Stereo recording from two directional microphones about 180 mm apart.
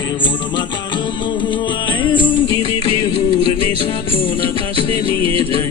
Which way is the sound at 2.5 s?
30° right (ahead or behind).